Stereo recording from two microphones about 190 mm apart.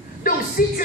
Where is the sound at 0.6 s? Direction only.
50° left (ahead or behind).